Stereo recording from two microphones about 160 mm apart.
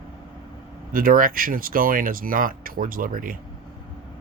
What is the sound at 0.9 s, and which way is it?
Speech, 60° right (ahead or behind).